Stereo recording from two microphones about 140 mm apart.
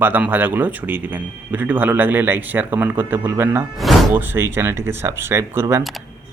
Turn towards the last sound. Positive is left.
turn(degrees=0)  # may be behind; listen again after turning